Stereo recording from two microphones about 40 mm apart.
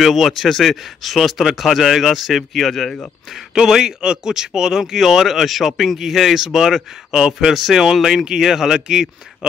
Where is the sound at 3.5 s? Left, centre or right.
Centre.